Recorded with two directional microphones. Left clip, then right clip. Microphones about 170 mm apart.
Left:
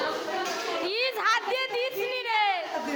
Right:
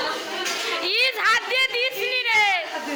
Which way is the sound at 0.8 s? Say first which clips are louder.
Right 6 dB; 15° left (ahead or behind).